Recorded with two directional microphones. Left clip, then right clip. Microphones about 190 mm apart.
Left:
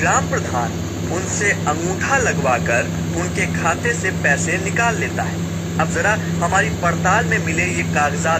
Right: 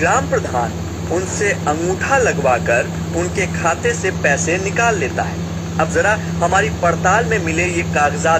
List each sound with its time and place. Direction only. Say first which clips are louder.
0.0 s speech: right 2 dB; 50° right (ahead or behind)
7.5 s speech: right 2 dB; 65° right (ahead or behind)